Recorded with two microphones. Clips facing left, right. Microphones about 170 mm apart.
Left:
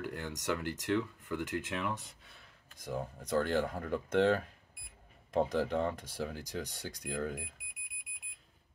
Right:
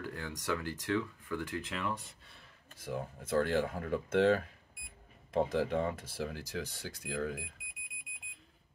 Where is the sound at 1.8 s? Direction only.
Centre (ahead or behind).